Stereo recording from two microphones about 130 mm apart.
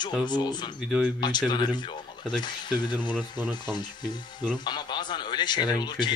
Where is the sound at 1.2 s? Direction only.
35° left (ahead or behind).